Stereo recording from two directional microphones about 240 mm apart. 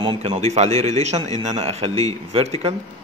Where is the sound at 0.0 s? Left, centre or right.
Right.